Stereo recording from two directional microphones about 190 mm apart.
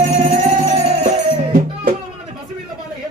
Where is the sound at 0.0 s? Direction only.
40° right (ahead or behind).